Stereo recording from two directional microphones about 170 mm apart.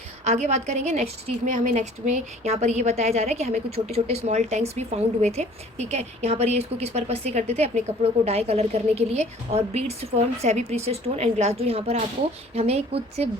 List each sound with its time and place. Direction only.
0.3 s a woman's voice: 40° right (ahead or behind)